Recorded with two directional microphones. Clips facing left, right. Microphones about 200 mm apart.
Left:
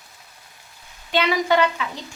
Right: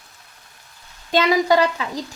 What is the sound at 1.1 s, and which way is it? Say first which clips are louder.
Speech: right 3 dB; 40° right (ahead or behind).